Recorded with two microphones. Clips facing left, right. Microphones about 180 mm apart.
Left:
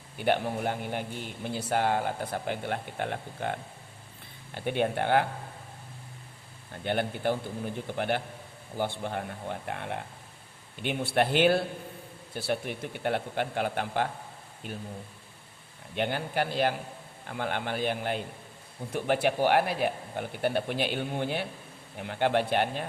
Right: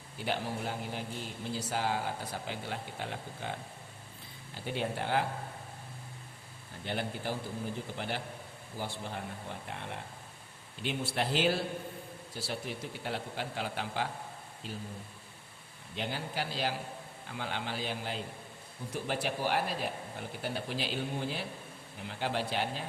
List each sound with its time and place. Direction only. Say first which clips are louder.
0.2 s speech: left 7 dB; 60° left (ahead or behind)
6.8 s speech: left 7 dB; 60° left (ahead or behind)
16.0 s speech: left 7 dB; 60° left (ahead or behind)